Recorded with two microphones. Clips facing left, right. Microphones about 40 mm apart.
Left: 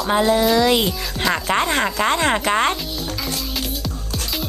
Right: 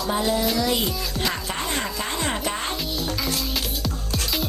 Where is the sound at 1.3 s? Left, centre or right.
Left.